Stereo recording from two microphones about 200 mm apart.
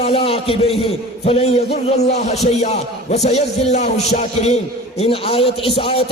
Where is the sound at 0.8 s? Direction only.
30° left (ahead or behind).